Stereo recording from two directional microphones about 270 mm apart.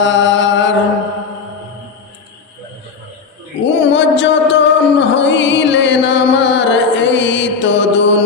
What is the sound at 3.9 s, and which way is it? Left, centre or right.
Music, left.